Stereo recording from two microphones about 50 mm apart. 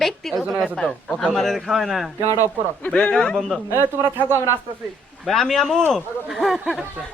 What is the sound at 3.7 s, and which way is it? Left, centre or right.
Speech, right.